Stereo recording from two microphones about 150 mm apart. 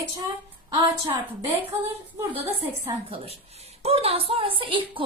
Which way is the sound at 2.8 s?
40° right (ahead or behind).